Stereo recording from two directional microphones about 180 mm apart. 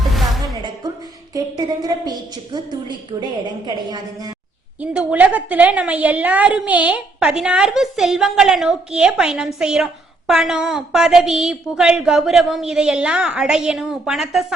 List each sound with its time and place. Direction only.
0.1 s music: centre (ahead or behind)
1.3 s a woman's voice: 20° right (ahead or behind)
4.8 s a woman's voice: 10° right (ahead or behind)